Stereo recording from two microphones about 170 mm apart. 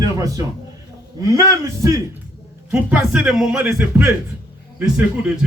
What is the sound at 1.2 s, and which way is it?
Speech, 20° right (ahead or behind).